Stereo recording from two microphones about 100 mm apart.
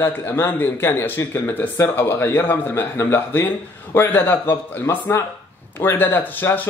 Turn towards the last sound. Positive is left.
turn(degrees=20)  # may be behind; listen again after turning